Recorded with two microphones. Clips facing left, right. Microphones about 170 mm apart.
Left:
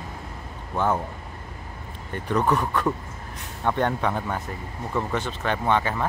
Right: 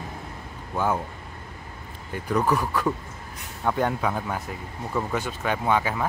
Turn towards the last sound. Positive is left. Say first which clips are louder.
# even
turn(degrees=-10)  # may be behind; listen again after turning